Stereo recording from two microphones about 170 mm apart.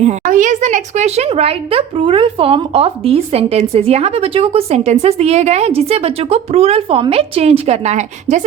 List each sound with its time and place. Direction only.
0.0 s speech: 45° right (ahead or behind)